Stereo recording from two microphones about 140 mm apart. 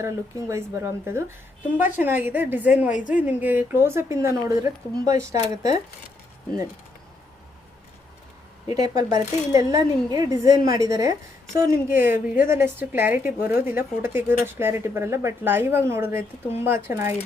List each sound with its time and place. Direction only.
0.0 s a woman's voice: 20° right (ahead or behind)
2.9 s a woman's voice: 70° left (ahead or behind)
3.2 s a woman's voice: 10° right (ahead or behind)
8.6 s a woman's voice: 25° right (ahead or behind)